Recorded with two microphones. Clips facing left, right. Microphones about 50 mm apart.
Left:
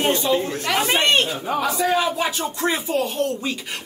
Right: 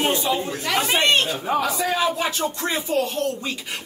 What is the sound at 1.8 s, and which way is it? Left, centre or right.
Speech, centre.